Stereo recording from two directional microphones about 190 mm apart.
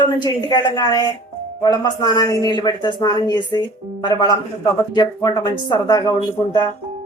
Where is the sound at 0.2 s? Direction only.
20° left (ahead or behind).